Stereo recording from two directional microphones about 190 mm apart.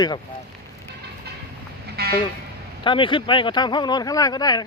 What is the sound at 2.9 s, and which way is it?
Speech, 25° left (ahead or behind).